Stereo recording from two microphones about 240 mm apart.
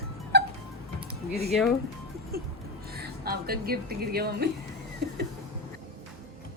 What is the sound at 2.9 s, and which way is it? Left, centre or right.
Speech, right.